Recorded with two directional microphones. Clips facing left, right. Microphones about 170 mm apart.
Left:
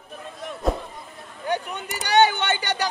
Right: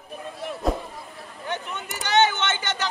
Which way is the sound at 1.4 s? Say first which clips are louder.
Left 5 dB; 40° left (ahead or behind).